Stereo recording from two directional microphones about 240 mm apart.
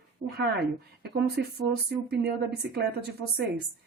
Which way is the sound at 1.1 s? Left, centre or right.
Right.